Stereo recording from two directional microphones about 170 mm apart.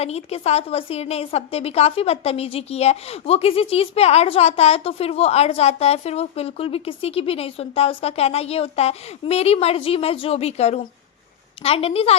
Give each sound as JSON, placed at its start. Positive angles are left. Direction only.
{"t": 0.0, "sound": "a woman's voice", "side_deg": 40}